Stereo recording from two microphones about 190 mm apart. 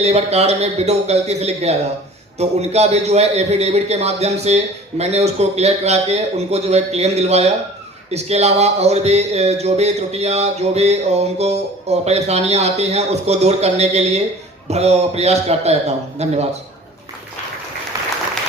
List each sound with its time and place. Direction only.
0.0 s speech: 35° right (ahead or behind)